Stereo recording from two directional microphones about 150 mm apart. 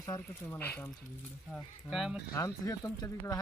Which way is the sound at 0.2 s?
15° left (ahead or behind).